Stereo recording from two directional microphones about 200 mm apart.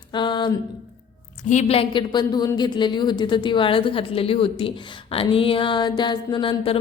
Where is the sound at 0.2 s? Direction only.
20° left (ahead or behind).